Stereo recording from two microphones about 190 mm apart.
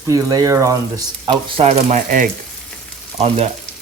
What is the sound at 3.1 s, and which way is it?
Frying, 35° right (ahead or behind).